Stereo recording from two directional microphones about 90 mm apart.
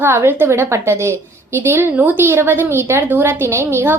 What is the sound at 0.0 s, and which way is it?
A woman's voice, 25° right (ahead or behind).